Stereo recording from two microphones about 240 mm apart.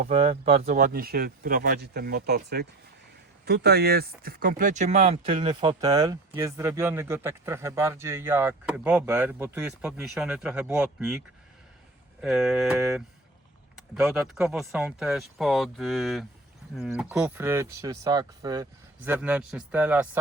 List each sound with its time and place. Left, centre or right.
0.0 s speech: right; by 11.2 s centre
12.2 s speech: centre